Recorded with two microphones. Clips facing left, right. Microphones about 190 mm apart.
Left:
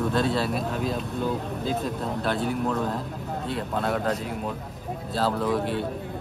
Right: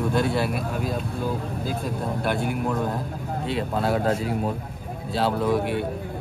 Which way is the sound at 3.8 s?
30° right (ahead or behind).